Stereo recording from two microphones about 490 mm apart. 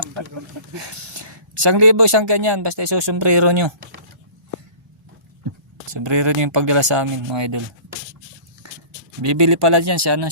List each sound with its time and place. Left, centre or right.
0.8 s a sound: right
1.7 s speech: right
5.9 s speech: right
9.2 s speech: right